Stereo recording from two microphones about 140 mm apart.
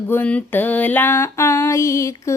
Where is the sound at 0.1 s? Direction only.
10° left (ahead or behind).